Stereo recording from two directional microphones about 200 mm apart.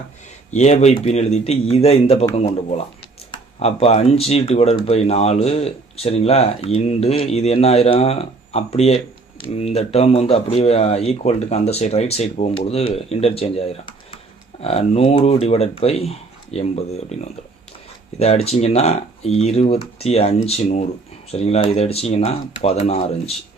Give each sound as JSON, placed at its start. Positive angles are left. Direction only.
{"t": 0.5, "sound": "speech", "side_deg": 35}